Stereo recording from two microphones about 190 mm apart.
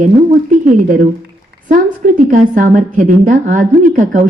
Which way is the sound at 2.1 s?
40° right (ahead or behind).